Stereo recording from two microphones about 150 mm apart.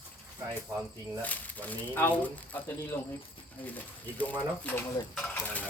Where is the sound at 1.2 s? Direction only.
10° left (ahead or behind).